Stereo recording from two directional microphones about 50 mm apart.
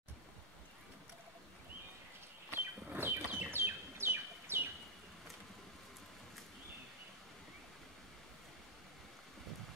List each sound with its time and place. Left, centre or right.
2.5 s bird: right